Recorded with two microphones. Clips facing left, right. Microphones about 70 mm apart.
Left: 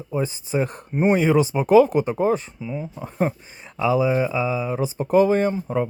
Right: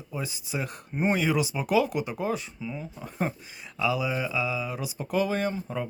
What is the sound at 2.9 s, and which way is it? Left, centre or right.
Speech, left.